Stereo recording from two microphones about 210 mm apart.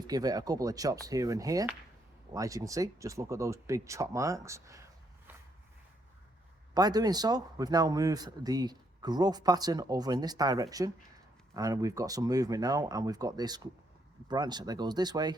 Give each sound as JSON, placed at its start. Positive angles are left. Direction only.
{"t": 0.1, "sound": "speech", "side_deg": -15}
{"t": 5.3, "sound": "a sound", "side_deg": -10}
{"t": 6.7, "sound": "speech", "side_deg": -20}